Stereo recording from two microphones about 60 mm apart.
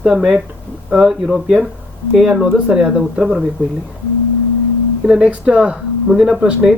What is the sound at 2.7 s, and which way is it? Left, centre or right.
Speech, centre.